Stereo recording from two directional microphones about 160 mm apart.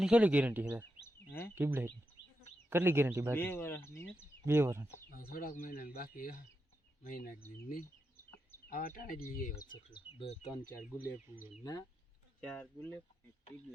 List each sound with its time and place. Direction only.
0.0 s speech: 10° right (ahead or behind)
1.0 s a sound: 15° left (ahead or behind)
1.5 s speech: 15° right (ahead or behind)
3.3 s speech: 15° left (ahead or behind)
4.4 s speech: 15° right (ahead or behind)
5.1 s speech: 65° left (ahead or behind)
8.7 s speech: 65° left (ahead or behind)
9.9 s speech: 35° left (ahead or behind)
10.5 s speech: 20° left (ahead or behind)
10.8 s speech: 10° right (ahead or behind)
11.6 s speech: 25° left (ahead or behind)
12.4 s speech: 10° left (ahead or behind)